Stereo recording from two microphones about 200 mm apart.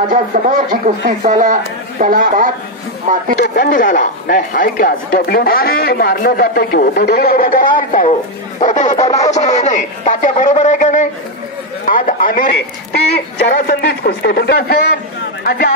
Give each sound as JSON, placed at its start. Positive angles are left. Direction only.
{"t": 0.1, "sound": "a man's voice", "side_deg": -40}
{"t": 3.3, "sound": "a man's voice", "side_deg": 50}